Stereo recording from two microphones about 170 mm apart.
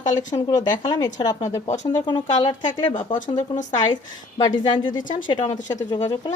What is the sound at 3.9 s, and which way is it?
A woman's voice, 25° left (ahead or behind).